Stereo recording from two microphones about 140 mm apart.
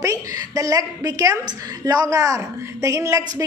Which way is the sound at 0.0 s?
25° right (ahead or behind).